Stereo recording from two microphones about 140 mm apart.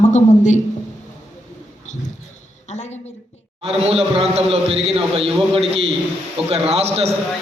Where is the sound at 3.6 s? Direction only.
45° right (ahead or behind).